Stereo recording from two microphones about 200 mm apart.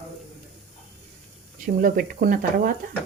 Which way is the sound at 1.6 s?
45° right (ahead or behind).